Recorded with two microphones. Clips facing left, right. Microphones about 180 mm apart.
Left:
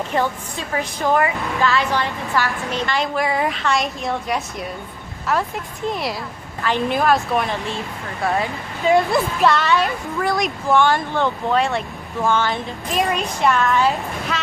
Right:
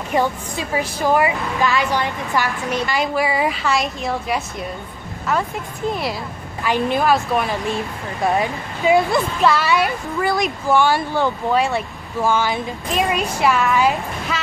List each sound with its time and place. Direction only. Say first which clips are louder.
0.1 s a woman's voice: right 6 dB; 15° right (ahead or behind)
2.7 s speech: right 3 dB; 5° right (ahead or behind)
7.6 s a woman's voice: right 4 dB; 15° right (ahead or behind)
8.9 s speech: even; centre (ahead or behind)
14.3 s train: right 1 dB; centre (ahead or behind)